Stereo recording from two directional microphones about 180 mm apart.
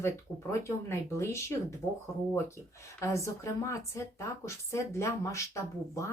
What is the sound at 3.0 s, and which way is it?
A woman's voice, 15° left (ahead or behind).